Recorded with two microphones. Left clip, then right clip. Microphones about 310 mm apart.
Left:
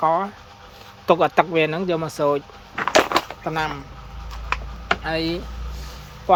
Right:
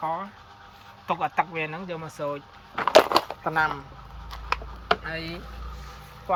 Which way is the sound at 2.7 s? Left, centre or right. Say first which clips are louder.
Even; right.